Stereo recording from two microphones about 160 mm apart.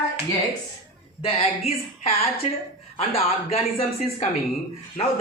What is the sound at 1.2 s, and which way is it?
Speech, 40° left (ahead or behind).